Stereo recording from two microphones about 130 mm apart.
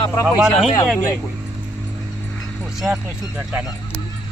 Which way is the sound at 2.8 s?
5° right (ahead or behind).